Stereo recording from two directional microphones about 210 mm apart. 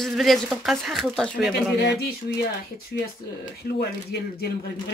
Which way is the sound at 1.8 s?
50° left (ahead or behind).